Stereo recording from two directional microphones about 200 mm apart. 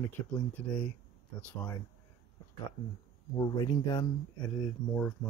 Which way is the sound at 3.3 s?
20° left (ahead or behind).